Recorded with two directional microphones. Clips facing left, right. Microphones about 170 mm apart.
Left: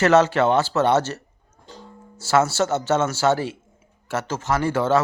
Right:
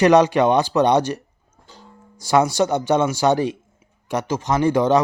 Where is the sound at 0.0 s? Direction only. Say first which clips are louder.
Right 3 dB; 15° right (ahead or behind).